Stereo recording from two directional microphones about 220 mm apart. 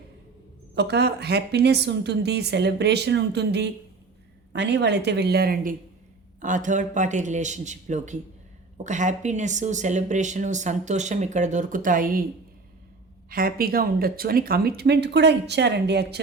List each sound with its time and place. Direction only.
0.8 s a woman's voice: 50° right (ahead or behind)
13.3 s a woman's voice: 40° right (ahead or behind)